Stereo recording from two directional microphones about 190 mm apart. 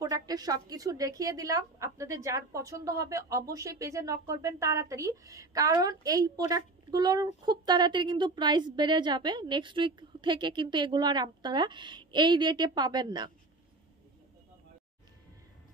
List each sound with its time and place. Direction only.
0.0 s a woman's voice: 20° right (ahead or behind)